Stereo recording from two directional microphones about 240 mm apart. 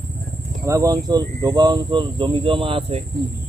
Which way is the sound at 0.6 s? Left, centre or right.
Centre.